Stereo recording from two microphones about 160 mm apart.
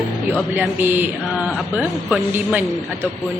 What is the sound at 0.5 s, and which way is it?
A man's voice, 10° right (ahead or behind).